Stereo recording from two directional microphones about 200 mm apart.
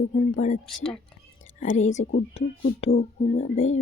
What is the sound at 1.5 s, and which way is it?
Speech, 35° left (ahead or behind).